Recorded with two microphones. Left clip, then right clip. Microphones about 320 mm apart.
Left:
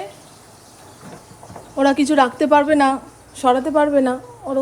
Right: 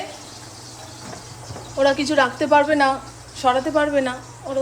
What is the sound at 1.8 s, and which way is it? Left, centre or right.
A woman's voice, centre.